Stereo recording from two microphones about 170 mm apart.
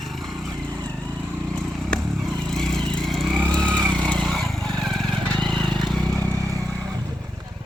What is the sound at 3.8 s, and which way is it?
Vehicle, 25° right (ahead or behind).